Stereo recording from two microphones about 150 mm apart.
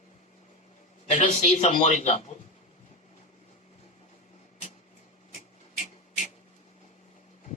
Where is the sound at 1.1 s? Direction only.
50° left (ahead or behind).